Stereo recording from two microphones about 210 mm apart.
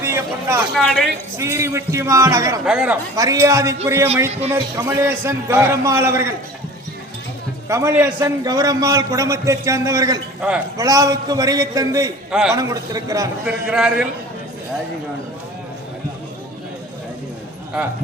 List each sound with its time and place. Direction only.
0.0 s a sound: 10° right (ahead or behind)
0.7 s a man's voice: centre (ahead or behind)
1.4 s a man's voice: 15° right (ahead or behind)
2.6 s a man's voice: 5° right (ahead or behind)
3.2 s a man's voice: 15° right (ahead or behind)
7.7 s a man's voice: 15° right (ahead or behind)
12.3 s a man's voice: 5° right (ahead or behind)
12.5 s a man's voice: 15° right (ahead or behind)
13.7 s a man's voice: 5° right (ahead or behind)